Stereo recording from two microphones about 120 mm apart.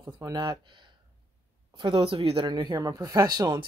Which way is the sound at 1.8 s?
45° right (ahead or behind).